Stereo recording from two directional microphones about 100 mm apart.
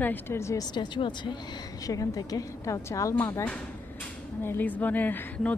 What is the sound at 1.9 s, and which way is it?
A woman's voice, 35° left (ahead or behind).